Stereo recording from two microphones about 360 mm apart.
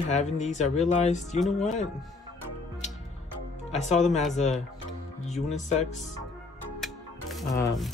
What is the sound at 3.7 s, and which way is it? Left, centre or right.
Speech, centre.